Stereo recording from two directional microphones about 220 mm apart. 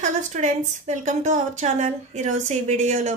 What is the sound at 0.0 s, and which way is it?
A woman's voice, 35° right (ahead or behind).